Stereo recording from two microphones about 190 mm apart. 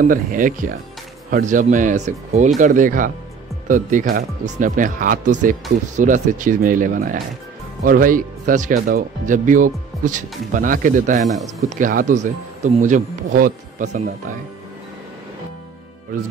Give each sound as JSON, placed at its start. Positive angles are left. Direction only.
{"t": 0.0, "sound": "speech", "side_deg": -45}